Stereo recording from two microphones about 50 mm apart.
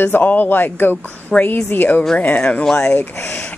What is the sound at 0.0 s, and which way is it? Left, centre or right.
Speech, left.